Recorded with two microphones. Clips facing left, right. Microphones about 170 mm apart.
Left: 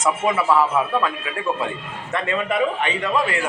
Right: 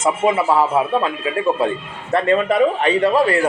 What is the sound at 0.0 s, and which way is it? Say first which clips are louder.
A man's voice: right 4 dB; 25° right (ahead or behind).